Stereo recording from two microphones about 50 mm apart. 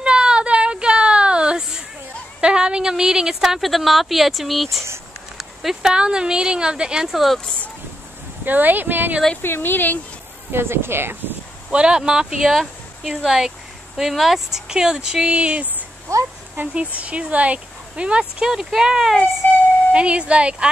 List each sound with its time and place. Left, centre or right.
0.0 s child singing: centre
2.4 s a woman's voice: centre
8.5 s speech: right
9.4 s speech: left
10.5 s speech: right
11.7 s speech: centre
16.7 s speech: right
18.5 s speech: centre
19.9 s speech: right